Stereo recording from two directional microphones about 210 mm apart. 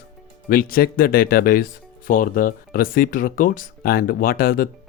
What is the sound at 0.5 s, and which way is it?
Speech, 45° left (ahead or behind).